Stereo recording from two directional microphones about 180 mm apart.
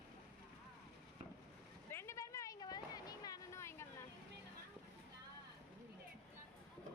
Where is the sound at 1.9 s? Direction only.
15° left (ahead or behind).